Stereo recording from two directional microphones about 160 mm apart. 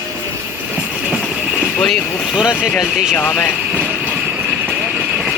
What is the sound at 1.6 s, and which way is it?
Speech, 5° left (ahead or behind).